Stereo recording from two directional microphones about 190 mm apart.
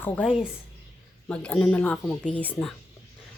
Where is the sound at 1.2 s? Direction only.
5° left (ahead or behind).